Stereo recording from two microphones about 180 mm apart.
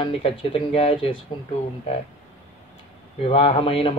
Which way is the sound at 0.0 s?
30° left (ahead or behind).